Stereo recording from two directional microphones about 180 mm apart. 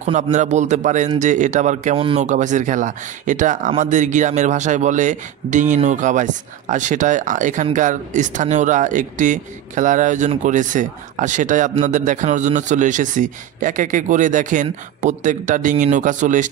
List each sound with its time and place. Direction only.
0.0 s a man's voice: 40° right (ahead or behind)
2.0 s speech: 30° right (ahead or behind)
2.2 s speech: 45° right (ahead or behind)